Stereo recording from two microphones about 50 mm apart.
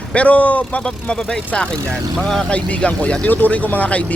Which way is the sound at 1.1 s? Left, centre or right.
Centre.